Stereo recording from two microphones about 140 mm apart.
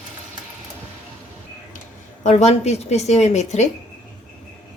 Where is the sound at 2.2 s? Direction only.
50° left (ahead or behind).